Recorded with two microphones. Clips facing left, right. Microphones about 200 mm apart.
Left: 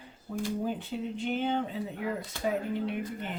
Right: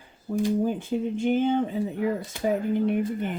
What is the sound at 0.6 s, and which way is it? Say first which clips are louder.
Speech: right 7 dB; 45° right (ahead or behind).